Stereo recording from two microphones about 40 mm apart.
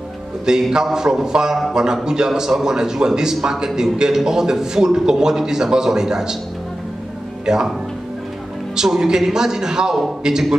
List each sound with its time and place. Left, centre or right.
0.5 s a man's voice: centre
7.4 s a man's voice: centre
8.7 s a man's voice: centre